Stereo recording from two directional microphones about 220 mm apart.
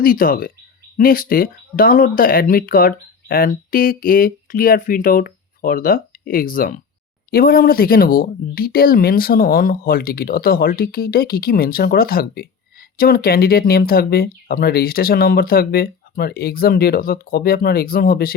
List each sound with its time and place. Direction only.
0.0 s speech: 40° left (ahead or behind)